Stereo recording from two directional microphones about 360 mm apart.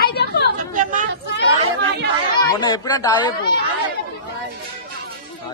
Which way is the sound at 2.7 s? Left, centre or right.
Centre.